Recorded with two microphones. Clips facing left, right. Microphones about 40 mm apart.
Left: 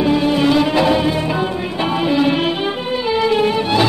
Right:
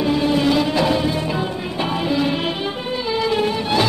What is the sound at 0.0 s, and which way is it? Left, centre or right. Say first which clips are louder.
Music: left 3 dB; centre.